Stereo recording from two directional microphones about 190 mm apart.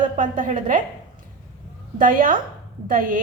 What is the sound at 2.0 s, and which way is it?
A woman's voice, 45° right (ahead or behind).